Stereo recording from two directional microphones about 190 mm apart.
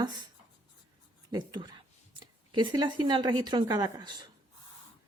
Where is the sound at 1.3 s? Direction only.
20° right (ahead or behind).